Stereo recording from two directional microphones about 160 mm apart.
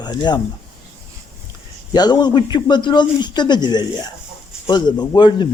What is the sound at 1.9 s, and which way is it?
A man's voice, 25° left (ahead or behind).